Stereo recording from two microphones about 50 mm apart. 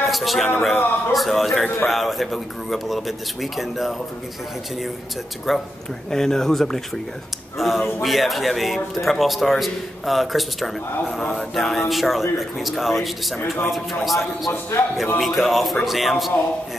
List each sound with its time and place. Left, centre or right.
0.0 s a man's voice: centre
5.5 s a man's voice: centre
6.0 s speech: centre
7.5 s a man's voice: centre
14.8 s speech: left
15.1 s a man's voice: centre